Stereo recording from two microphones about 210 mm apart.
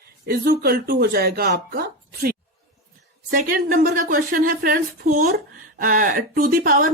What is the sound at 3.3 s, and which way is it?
Speech, 40° right (ahead or behind).